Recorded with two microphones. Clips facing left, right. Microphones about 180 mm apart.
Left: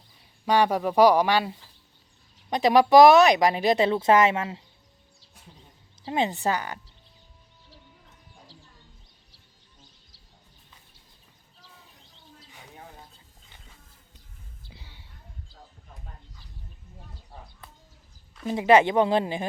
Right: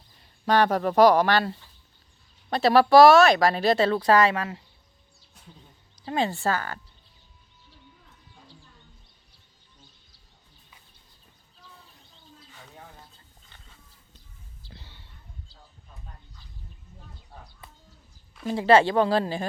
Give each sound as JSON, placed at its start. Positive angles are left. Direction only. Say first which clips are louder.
{"t": 0.2, "sound": "speech", "louder": "even", "side_deg": 10}
{"t": 6.0, "sound": "speech", "louder": "even", "side_deg": 20}
{"t": 14.7, "sound": "a sound", "louder": "right 2 dB", "side_deg": 10}
{"t": 18.5, "sound": "speech", "louder": "even", "side_deg": 15}